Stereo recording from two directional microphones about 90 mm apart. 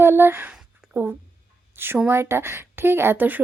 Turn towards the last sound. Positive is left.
turn(degrees=-20)  # may be behind; listen again after turning